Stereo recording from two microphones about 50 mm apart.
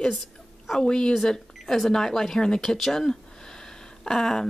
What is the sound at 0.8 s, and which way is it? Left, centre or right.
Speech, centre.